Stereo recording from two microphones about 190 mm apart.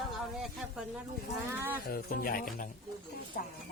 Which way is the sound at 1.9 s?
50° left (ahead or behind).